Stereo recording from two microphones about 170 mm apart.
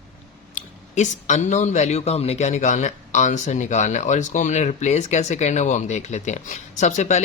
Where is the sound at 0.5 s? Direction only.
45° left (ahead or behind).